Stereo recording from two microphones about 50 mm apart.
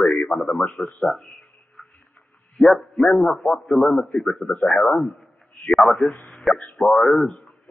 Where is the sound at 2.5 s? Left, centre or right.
Centre.